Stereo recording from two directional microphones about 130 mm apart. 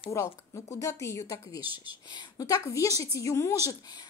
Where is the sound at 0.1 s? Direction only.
20° left (ahead or behind).